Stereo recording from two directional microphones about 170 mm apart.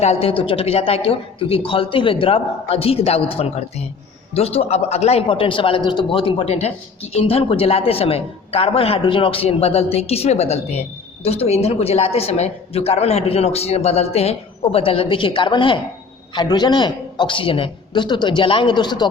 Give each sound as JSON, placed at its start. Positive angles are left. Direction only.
{"t": 0.0, "sound": "a man's voice", "side_deg": 35}